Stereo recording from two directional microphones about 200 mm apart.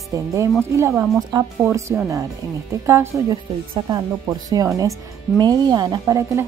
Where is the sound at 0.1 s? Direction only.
15° right (ahead or behind).